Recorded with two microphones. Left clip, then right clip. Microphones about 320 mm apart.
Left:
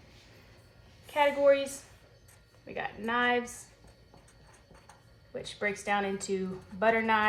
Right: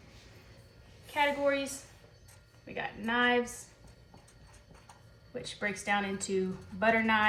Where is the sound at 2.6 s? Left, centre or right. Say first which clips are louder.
Left 1 dB; left.